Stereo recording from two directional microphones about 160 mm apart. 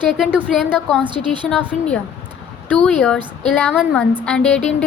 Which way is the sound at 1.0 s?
30° right (ahead or behind).